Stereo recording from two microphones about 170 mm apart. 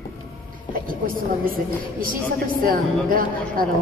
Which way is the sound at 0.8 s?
55° right (ahead or behind).